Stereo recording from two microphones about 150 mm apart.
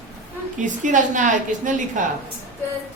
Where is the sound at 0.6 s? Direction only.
55° right (ahead or behind).